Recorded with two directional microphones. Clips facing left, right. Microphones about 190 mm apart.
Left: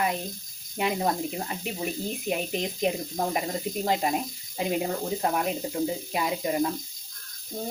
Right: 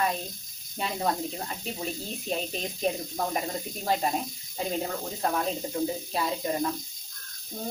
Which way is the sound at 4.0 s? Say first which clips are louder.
Left 2 dB; 10° left (ahead or behind).